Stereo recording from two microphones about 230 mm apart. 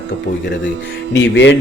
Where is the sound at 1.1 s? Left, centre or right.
Left.